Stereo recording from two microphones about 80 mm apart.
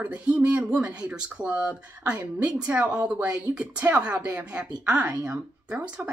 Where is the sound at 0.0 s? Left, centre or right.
Centre.